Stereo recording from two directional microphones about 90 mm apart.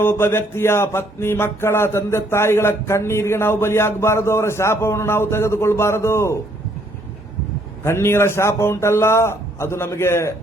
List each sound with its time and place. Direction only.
0.0 s music: 25° left (ahead or behind)
7.9 s music: 30° left (ahead or behind)